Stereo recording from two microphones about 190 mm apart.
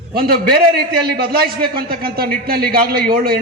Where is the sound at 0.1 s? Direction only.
55° right (ahead or behind).